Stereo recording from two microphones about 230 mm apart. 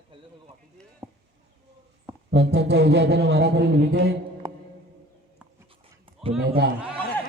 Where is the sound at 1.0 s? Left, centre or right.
Centre.